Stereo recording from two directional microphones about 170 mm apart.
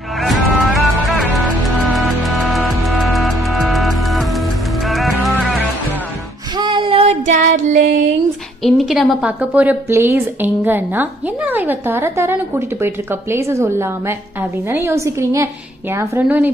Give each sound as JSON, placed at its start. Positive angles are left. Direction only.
{"t": 0.2, "sound": "music", "side_deg": 0}
{"t": 6.5, "sound": "child singing", "side_deg": -25}
{"t": 8.6, "sound": "a woman's voice", "side_deg": 0}